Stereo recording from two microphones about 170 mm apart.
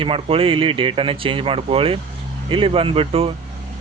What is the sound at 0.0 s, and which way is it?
Speech, 30° right (ahead or behind).